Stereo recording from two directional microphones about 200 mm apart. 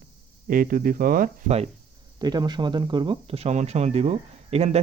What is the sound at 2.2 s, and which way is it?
Speech, 20° right (ahead or behind).